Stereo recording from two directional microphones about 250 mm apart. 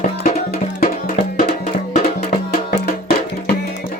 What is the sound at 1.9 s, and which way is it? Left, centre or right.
Music, left.